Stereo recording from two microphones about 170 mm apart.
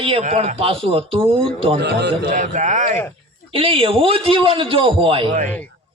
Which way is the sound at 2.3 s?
45° right (ahead or behind).